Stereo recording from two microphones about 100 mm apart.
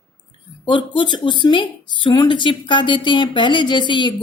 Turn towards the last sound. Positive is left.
turn(degrees=50)  # may be behind; listen again after turning